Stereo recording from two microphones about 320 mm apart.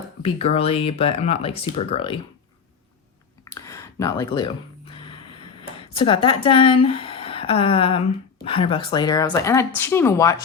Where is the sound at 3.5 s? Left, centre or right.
Centre.